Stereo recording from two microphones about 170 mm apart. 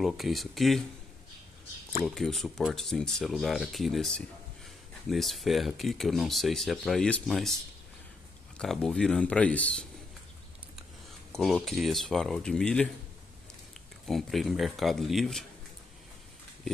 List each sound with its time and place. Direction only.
0.0 s speech: centre (ahead or behind)
2.0 s speech: centre (ahead or behind)
8.5 s speech: 5° left (ahead or behind)
11.3 s speech: centre (ahead or behind)
14.0 s speech: centre (ahead or behind)